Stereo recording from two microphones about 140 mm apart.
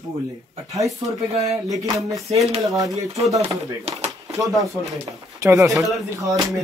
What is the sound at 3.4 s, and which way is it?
Speech, 45° right (ahead or behind).